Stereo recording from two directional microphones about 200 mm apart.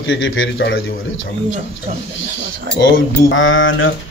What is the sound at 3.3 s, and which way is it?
Speech, 75° left (ahead or behind).